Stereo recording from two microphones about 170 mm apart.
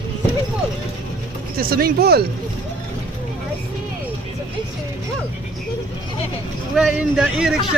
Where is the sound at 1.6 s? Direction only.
60° right (ahead or behind).